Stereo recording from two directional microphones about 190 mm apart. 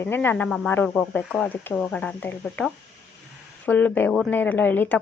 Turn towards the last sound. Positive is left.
turn(degrees=10)  # may be behind; listen again after turning